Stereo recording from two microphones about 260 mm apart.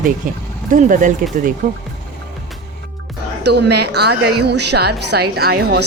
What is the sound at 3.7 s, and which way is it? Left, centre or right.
A woman's voice, right.